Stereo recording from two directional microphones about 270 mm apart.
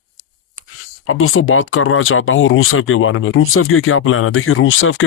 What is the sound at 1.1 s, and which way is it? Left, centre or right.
Speech, left.